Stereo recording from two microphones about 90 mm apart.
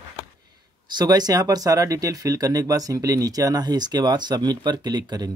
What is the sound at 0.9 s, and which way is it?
Speech, 45° right (ahead or behind).